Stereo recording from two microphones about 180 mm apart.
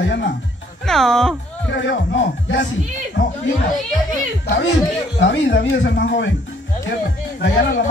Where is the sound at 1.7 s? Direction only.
90° left.